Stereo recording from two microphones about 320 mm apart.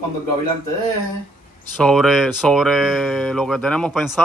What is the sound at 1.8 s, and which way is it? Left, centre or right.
Speech, centre.